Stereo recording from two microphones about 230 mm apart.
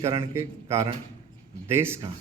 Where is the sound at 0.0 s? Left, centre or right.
Centre.